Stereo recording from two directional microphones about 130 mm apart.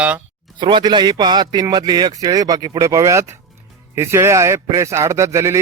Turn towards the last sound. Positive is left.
turn(degrees=-25)  # may be behind; listen again after turning